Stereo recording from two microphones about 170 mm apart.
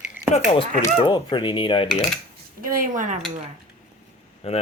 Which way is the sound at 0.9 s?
30° left (ahead or behind).